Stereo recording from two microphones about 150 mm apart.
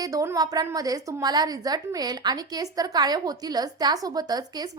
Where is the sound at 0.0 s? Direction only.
25° right (ahead or behind).